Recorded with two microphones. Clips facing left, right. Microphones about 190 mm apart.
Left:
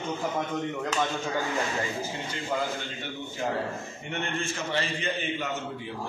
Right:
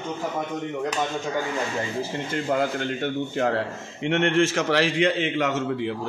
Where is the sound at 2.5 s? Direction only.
65° right (ahead or behind); by 6.0 s 90° right.